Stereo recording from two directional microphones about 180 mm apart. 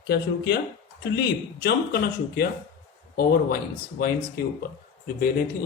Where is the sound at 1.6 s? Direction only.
55° left (ahead or behind).